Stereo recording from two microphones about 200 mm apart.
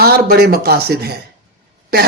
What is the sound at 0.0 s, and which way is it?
Speech, 50° right (ahead or behind).